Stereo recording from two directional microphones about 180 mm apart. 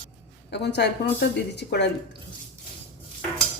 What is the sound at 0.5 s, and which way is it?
A woman's voice, 70° left (ahead or behind).